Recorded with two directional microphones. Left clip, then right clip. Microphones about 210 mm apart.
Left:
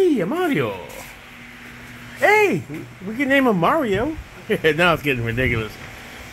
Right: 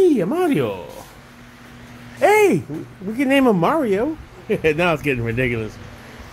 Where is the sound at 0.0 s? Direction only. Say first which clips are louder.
Right 2 dB; 15° right (ahead or behind).